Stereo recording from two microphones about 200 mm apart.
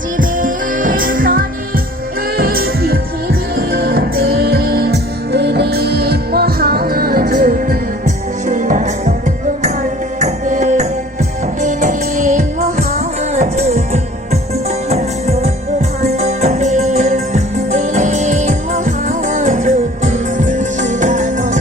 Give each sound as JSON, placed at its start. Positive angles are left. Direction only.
{"t": 0.2, "sound": "music", "side_deg": -45}
{"t": 10.2, "sound": "music", "side_deg": -35}